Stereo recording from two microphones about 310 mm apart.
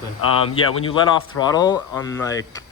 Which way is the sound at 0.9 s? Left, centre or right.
Centre.